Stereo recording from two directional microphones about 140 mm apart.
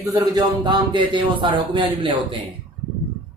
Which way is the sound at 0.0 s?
25° right (ahead or behind).